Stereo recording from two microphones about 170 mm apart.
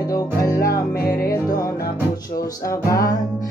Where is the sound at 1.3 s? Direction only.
20° left (ahead or behind).